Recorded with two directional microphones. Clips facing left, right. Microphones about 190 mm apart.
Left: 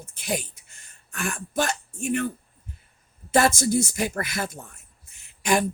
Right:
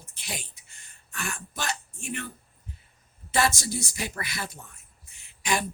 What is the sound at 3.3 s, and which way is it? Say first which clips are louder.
Speech: left 6 dB; 50° left (ahead or behind).